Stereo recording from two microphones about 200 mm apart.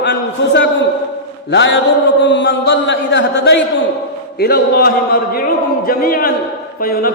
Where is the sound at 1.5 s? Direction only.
65° left (ahead or behind).